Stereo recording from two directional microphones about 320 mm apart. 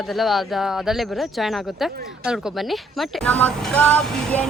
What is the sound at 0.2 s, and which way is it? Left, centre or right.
Speech, centre.